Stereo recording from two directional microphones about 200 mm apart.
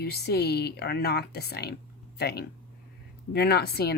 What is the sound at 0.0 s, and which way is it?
Speech, 55° left (ahead or behind).